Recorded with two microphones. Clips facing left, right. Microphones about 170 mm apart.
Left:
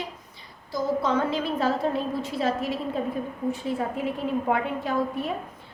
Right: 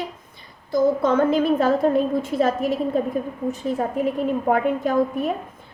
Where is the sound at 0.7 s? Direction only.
50° right (ahead or behind).